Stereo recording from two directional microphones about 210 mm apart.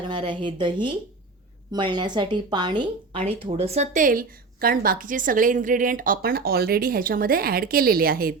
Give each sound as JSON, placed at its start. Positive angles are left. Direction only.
{"t": 0.1, "sound": "a woman's voice", "side_deg": -25}